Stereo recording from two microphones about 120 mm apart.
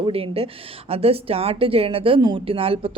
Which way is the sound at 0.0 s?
50° right (ahead or behind).